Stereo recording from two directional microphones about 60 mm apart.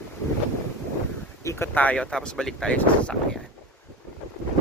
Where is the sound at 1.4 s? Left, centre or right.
Left.